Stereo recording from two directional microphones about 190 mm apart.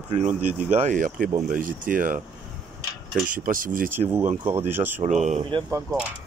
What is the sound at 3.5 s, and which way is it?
Speech, 45° right (ahead or behind).